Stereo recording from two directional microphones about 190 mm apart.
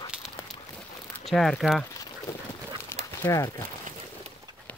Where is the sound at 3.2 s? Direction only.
15° left (ahead or behind).